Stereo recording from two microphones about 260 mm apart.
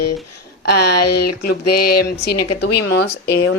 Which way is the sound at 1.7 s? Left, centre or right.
Left.